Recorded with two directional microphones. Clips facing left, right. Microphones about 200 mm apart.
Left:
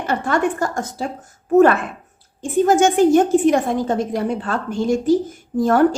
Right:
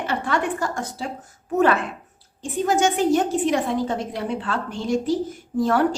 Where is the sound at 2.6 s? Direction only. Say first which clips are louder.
Left 6 dB; 50° left (ahead or behind).